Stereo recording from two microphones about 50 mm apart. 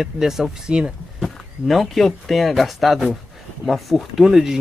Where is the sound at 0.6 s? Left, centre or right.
Centre.